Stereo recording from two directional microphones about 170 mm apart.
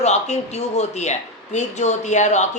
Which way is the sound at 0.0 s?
40° left (ahead or behind).